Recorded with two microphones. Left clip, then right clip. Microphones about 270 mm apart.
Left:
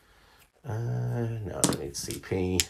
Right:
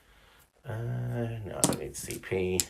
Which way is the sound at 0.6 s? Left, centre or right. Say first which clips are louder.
Left 2 dB; centre.